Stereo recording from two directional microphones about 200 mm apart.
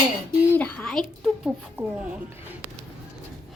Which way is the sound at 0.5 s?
5° left (ahead or behind).